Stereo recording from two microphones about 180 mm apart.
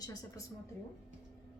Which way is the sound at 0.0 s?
20° left (ahead or behind).